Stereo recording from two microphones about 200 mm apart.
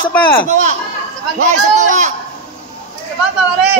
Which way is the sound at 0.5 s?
40° right (ahead or behind).